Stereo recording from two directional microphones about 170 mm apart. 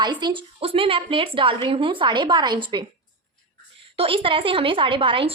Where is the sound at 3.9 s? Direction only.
30° right (ahead or behind).